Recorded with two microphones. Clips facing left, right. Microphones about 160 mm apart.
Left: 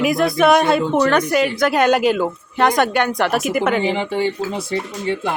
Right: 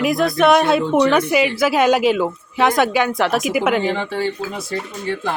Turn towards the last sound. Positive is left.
turn(degrees=25)  # may be behind; listen again after turning